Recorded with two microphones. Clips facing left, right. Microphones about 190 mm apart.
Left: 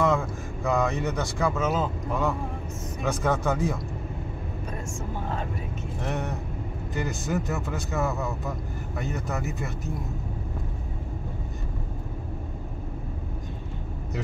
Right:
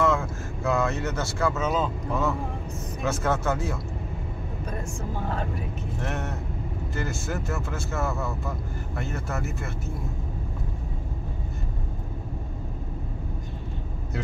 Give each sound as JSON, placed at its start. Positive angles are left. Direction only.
{"t": 0.7, "sound": "speech", "side_deg": 15}
{"t": 6.0, "sound": "speech", "side_deg": 15}
{"t": 9.3, "sound": "speech", "side_deg": 0}